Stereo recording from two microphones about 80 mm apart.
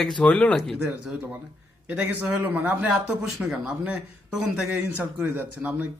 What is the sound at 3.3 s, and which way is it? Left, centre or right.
A man's voice, centre.